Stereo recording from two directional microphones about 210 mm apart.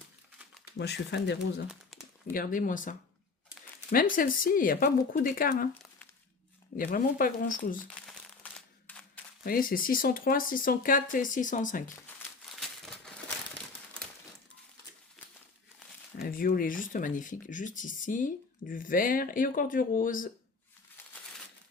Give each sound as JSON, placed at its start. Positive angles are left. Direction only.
{"t": 0.8, "sound": "speech", "side_deg": 55}
{"t": 1.9, "sound": "a sound", "side_deg": 0}
{"t": 2.3, "sound": "speech", "side_deg": 40}
{"t": 3.9, "sound": "speech", "side_deg": 40}
{"t": 6.7, "sound": "speech", "side_deg": 40}
{"t": 8.5, "sound": "single-lens reflex camera", "side_deg": 5}
{"t": 9.4, "sound": "speech", "side_deg": 45}
{"t": 16.1, "sound": "speech", "side_deg": 45}